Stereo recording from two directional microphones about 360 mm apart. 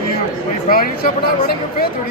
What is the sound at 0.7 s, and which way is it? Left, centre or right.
A woman's voice, left.